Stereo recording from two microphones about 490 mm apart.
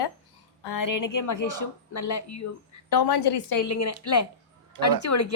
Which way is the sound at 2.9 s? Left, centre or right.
Left.